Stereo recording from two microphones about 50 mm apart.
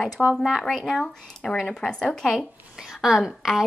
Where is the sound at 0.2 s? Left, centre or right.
Centre.